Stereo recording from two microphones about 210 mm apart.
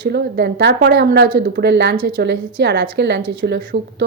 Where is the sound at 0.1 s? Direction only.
50° right (ahead or behind).